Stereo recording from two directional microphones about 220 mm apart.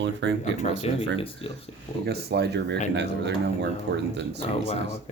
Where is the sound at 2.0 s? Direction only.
45° right (ahead or behind).